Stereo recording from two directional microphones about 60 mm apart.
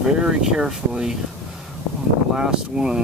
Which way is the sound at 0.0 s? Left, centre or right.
Centre.